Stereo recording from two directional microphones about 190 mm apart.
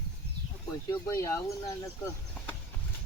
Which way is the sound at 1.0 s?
15° left (ahead or behind).